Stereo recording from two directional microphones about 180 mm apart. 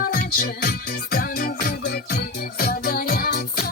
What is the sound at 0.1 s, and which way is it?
Music, 55° left (ahead or behind).